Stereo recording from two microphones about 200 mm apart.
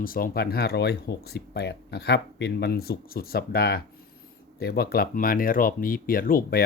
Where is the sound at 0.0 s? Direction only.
45° left (ahead or behind).